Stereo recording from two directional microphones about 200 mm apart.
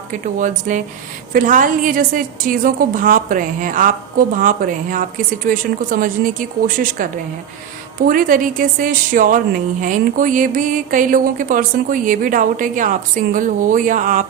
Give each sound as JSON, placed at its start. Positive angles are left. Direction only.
{"t": 0.1, "sound": "a woman's voice", "side_deg": -40}